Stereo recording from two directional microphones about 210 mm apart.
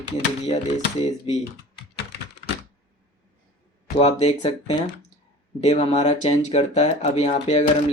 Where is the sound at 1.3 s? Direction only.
30° left (ahead or behind).